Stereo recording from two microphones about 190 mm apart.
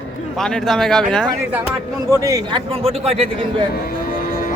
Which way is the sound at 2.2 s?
15° right (ahead or behind).